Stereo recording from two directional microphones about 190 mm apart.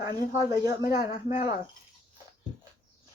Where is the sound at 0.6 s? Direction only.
15° right (ahead or behind).